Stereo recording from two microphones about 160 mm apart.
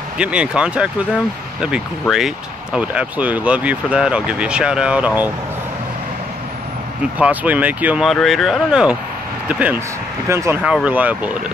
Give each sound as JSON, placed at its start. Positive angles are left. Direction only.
{"t": 0.2, "sound": "speech", "side_deg": -5}
{"t": 7.0, "sound": "speech", "side_deg": -10}
{"t": 10.6, "sound": "speech", "side_deg": -5}